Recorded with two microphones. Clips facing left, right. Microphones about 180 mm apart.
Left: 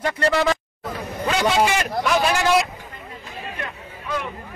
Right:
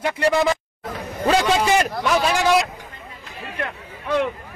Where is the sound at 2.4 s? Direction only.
Centre (ahead or behind).